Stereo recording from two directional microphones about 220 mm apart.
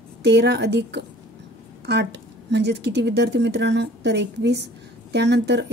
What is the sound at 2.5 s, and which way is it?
A woman's voice, 50° right (ahead or behind).